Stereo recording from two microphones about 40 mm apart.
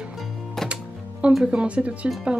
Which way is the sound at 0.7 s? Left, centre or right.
Right.